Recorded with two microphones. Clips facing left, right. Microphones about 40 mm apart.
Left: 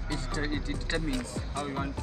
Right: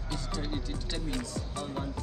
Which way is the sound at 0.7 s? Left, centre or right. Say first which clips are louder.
Left 4 dB; left.